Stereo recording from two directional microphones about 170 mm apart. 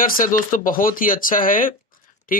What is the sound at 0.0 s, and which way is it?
Speech, 55° left (ahead or behind).